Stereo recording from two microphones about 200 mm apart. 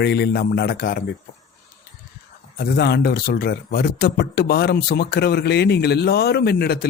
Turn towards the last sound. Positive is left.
turn(degrees=50)  # may be behind; listen again after turning